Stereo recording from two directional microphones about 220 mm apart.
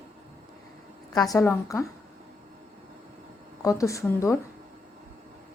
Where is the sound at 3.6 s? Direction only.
15° left (ahead or behind).